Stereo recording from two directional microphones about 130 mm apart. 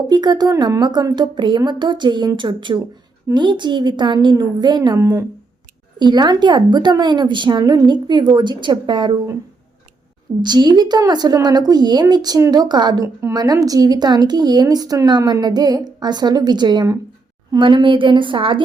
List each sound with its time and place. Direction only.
0.1 s speech: 35° right (ahead or behind)
10.4 s speech: 35° right (ahead or behind)